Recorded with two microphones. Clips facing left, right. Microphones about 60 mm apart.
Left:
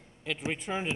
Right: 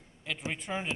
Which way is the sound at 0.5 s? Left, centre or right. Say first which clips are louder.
Left 2 dB; centre.